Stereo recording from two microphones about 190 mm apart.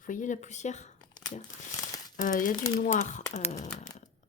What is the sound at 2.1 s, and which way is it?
Speech, 45° left (ahead or behind).